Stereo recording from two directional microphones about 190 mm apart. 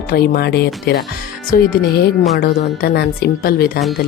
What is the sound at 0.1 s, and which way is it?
Speech, 55° left (ahead or behind).